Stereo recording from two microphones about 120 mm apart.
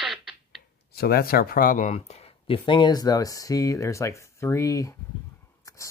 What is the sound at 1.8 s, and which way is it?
Speech, 65° left (ahead or behind).